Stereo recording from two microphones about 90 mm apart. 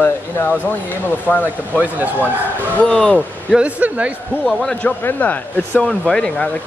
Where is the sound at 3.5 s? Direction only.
15° right (ahead or behind).